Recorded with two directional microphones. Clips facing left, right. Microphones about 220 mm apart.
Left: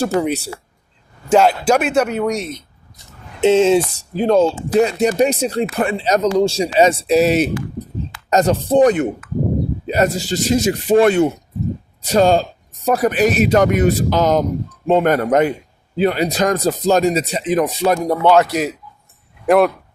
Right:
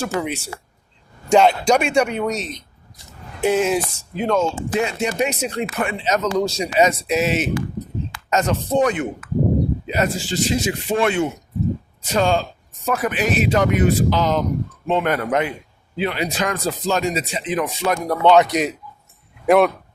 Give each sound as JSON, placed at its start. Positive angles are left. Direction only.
{"t": 0.0, "sound": "speech", "side_deg": 35}
{"t": 1.3, "sound": "speech", "side_deg": 5}
{"t": 3.4, "sound": "speech", "side_deg": 25}
{"t": 18.2, "sound": "speech", "side_deg": 5}